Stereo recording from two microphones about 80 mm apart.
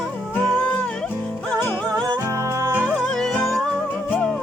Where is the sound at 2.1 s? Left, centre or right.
Right.